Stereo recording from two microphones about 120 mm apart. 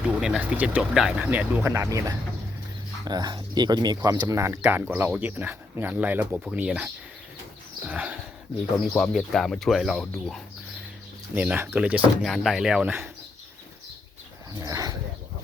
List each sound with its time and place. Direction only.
0.2 s speech: 5° right (ahead or behind)
9.0 s speech: centre (ahead or behind)
11.3 s speech: 15° right (ahead or behind)
12.2 s speech: centre (ahead or behind)
14.6 s speech: 30° right (ahead or behind)